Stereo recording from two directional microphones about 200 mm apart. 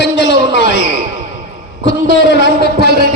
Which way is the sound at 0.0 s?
65° left (ahead or behind).